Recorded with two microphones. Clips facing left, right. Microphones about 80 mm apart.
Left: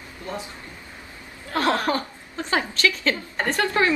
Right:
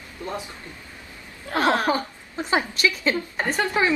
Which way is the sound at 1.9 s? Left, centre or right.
Centre.